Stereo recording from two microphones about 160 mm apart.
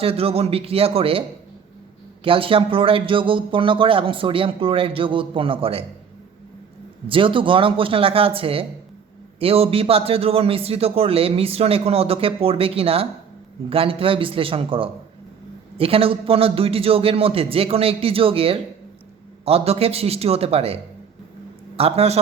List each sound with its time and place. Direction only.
0.0 s a man's voice: 35° right (ahead or behind)
2.2 s a man's voice: 35° right (ahead or behind)
7.1 s a man's voice: 30° right (ahead or behind)
21.8 s a man's voice: 40° right (ahead or behind)